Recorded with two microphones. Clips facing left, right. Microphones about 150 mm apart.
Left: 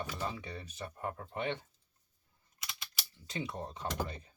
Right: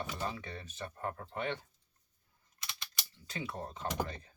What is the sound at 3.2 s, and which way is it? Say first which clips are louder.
Speech: left 1 dB; 20° left (ahead or behind).